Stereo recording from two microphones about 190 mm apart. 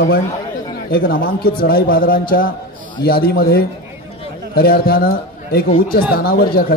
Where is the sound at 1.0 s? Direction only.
50° left (ahead or behind).